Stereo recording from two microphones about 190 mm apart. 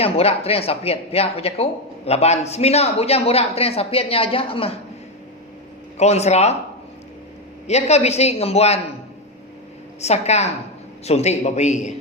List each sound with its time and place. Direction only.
0.0 s speech: 30° left (ahead or behind)
6.0 s speech: 35° left (ahead or behind)
7.7 s speech: 35° left (ahead or behind)
10.0 s speech: 35° left (ahead or behind)